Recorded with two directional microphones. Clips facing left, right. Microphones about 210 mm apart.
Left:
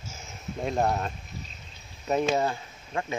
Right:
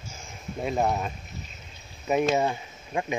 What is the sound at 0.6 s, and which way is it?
Speech, 5° right (ahead or behind).